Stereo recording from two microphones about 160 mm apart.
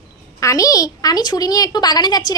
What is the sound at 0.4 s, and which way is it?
A woman's voice, 20° left (ahead or behind).